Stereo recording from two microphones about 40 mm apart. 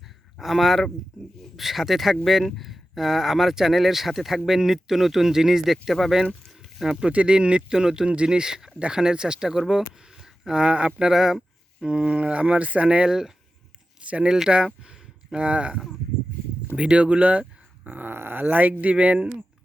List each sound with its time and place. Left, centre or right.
0.3 s speech: centre
6.5 s a sound: centre
7.1 s speech: right
7.7 s speech: centre
10.5 s speech: right
11.8 s speech: right
13.1 s speech: centre
14.0 s a sound: right
14.5 s speech: right
17.8 s a sound: right
18.1 s speech: right
18.5 s speech: right